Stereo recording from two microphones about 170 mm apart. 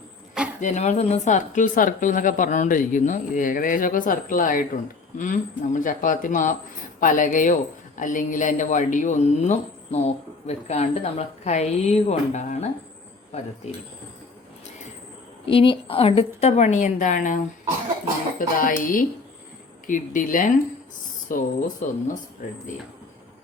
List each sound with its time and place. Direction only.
0.6 s a woman's voice: 45° left (ahead or behind)
13.6 s a woman's voice: 40° left (ahead or behind)
15.4 s a woman's voice: 30° left (ahead or behind); by 22.6 s 50° left (ahead or behind)